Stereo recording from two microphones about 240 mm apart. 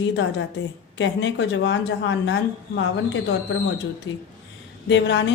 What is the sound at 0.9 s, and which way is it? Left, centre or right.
Speech, left.